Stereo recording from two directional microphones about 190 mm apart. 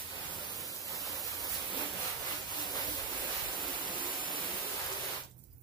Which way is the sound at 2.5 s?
20° left (ahead or behind).